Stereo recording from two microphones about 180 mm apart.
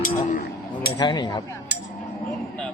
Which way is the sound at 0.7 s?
25° left (ahead or behind).